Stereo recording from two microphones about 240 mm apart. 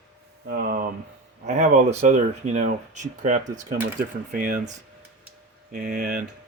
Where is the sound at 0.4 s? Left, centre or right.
Right.